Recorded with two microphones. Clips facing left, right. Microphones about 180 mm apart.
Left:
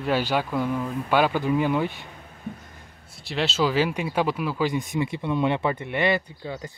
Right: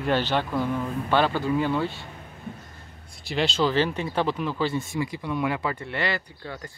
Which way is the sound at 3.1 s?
Centre (ahead or behind).